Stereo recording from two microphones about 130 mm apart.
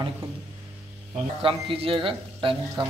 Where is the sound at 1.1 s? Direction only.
45° right (ahead or behind).